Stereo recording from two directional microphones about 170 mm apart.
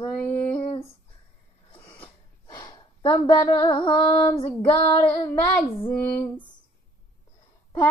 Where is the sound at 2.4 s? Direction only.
25° left (ahead or behind).